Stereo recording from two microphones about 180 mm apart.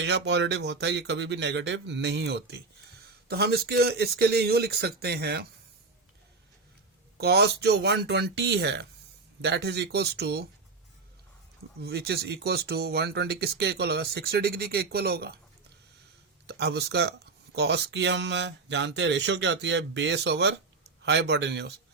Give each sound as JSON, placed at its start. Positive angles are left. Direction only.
{"t": 0.0, "sound": "speech", "side_deg": -75}
{"t": 7.2, "sound": "speech", "side_deg": -65}
{"t": 11.8, "sound": "speech", "side_deg": -65}
{"t": 16.5, "sound": "speech", "side_deg": -65}